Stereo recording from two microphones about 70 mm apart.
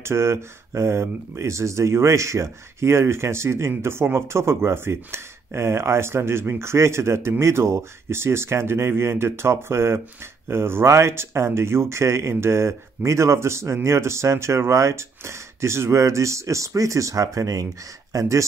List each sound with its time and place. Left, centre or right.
0.0 s speech: right